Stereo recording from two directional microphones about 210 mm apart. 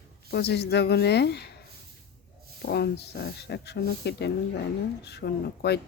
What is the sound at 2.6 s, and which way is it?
Speech, 50° left (ahead or behind).